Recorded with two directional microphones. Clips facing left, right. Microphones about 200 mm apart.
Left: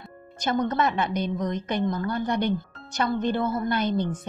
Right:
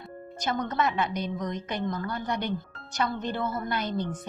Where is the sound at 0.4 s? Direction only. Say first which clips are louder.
Left 4 dB; 25° left (ahead or behind).